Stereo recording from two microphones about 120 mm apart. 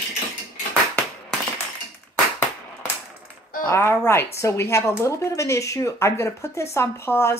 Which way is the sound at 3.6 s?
20° left (ahead or behind).